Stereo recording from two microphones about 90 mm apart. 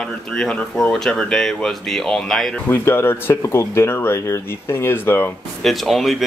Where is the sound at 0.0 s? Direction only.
10° left (ahead or behind).